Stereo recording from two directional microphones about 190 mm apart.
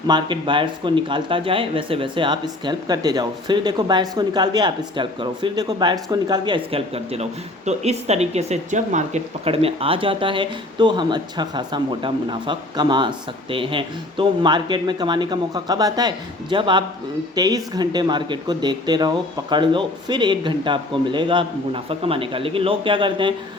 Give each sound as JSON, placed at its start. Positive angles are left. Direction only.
{"t": 0.1, "sound": "speech", "side_deg": -25}